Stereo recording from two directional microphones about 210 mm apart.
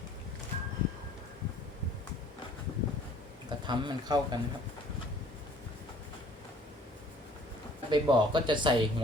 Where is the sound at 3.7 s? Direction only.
20° right (ahead or behind).